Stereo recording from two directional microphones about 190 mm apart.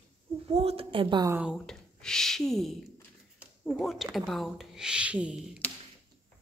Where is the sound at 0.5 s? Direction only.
30° right (ahead or behind).